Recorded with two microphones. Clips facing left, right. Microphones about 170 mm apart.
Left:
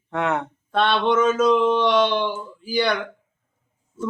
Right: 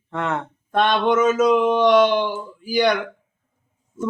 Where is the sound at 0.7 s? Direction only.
15° right (ahead or behind).